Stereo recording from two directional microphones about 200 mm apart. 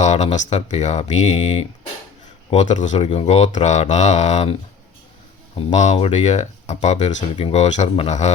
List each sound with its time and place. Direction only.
0.0 s speech: 35° left (ahead or behind)
5.5 s speech: 35° left (ahead or behind)